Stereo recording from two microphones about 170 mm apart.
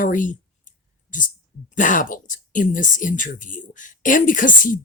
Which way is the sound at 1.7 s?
50° left (ahead or behind).